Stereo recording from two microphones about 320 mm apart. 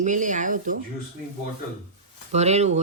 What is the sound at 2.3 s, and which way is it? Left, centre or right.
Speech, right.